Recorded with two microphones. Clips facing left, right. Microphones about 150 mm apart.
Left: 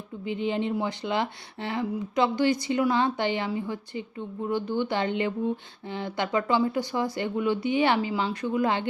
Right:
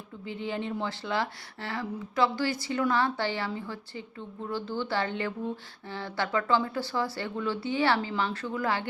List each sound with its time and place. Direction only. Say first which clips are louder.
0.3 s speech: left 6 dB; 20° left (ahead or behind)